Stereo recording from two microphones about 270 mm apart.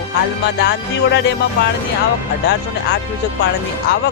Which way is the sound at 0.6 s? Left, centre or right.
Left.